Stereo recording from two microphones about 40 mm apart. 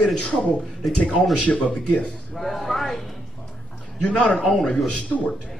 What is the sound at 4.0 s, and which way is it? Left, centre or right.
Speech, left.